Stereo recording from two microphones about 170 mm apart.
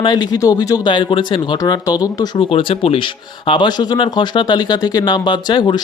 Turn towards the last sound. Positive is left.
turn(degrees=25)  # may be behind; listen again after turning